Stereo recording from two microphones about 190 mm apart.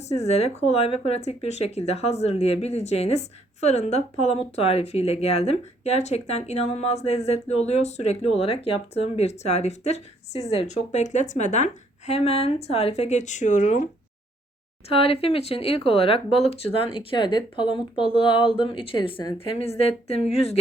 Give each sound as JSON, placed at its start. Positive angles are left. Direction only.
{"t": 0.1, "sound": "speech", "side_deg": 35}
{"t": 14.8, "sound": "speech", "side_deg": 30}